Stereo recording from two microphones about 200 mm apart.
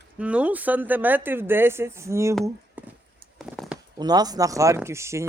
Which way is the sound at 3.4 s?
Centre (ahead or behind).